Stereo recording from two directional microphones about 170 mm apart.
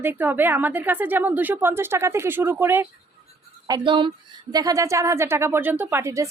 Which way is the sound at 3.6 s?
25° right (ahead or behind).